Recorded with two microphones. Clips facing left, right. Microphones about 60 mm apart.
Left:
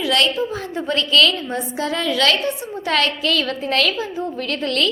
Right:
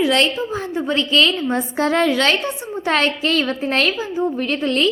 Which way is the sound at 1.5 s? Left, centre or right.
Right.